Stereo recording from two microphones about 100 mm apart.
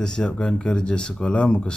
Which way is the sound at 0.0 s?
5° left (ahead or behind).